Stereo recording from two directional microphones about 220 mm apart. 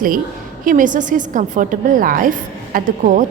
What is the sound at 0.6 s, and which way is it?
A woman's voice, 35° right (ahead or behind).